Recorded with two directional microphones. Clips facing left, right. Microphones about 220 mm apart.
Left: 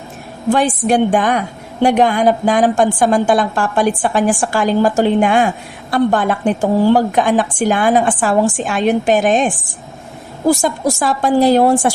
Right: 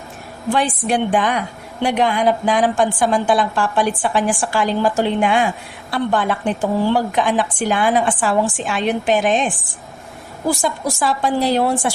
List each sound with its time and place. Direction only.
0.5 s a woman's voice: 45° left (ahead or behind)